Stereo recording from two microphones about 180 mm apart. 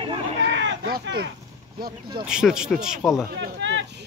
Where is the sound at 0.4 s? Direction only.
90° right; by 1.3 s 70° right (ahead or behind).